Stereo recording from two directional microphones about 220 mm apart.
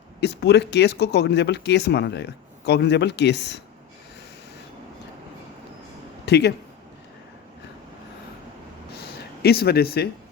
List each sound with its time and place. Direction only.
0.2 s speech: 50° left (ahead or behind)
6.2 s speech: 50° left (ahead or behind)
8.9 s a sound: 45° left (ahead or behind)